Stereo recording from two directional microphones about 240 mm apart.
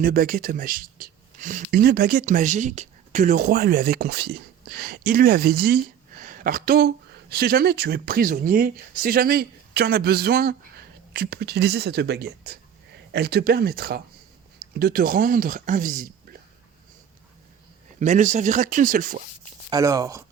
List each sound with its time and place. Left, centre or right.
0.0 s speech: right
18.0 s speech: right
19.7 s speech: centre